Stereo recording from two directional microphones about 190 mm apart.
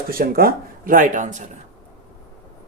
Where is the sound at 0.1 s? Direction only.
50° right (ahead or behind).